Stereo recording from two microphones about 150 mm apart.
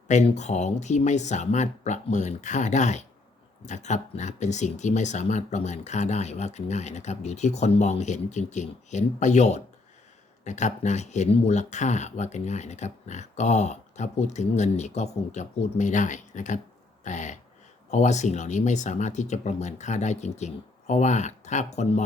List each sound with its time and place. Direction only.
0.1 s speech: 50° left (ahead or behind)
17.0 s a sound: 55° left (ahead or behind)
17.9 s speech: 50° left (ahead or behind)